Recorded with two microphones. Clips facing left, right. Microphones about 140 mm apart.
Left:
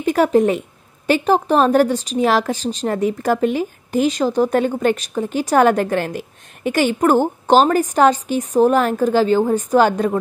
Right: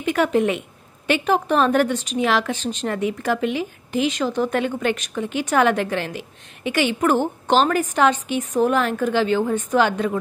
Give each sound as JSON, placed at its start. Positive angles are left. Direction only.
{"t": 0.0, "sound": "a woman's voice", "side_deg": 40}